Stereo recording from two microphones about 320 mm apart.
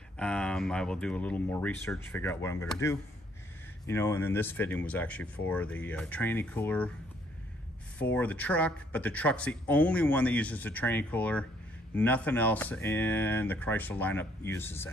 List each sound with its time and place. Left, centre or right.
0.2 s speech: centre
8.0 s speech: centre